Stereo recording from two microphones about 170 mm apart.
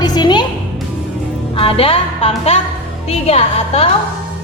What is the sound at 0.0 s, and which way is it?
Music, 25° left (ahead or behind).